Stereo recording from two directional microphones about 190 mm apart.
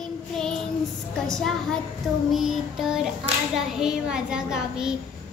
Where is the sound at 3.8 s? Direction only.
5° right (ahead or behind).